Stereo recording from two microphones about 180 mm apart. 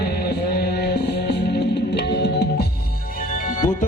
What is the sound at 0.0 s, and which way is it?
Music, 60° left (ahead or behind).